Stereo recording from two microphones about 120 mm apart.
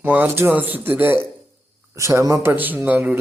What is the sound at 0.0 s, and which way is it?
A man's voice, 15° right (ahead or behind).